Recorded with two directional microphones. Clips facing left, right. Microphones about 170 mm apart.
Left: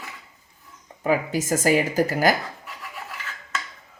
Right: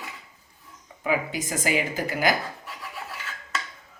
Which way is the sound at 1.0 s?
40° left (ahead or behind).